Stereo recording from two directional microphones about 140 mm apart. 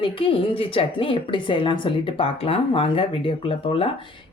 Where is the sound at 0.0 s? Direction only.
40° left (ahead or behind).